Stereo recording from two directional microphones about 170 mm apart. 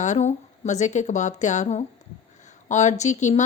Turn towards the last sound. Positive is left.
turn(degrees=45)  # may be behind; listen again after turning